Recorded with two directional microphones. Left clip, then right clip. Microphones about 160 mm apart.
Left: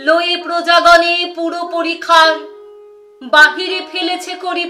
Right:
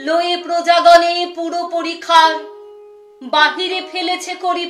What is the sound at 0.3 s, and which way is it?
Speech, 20° left (ahead or behind).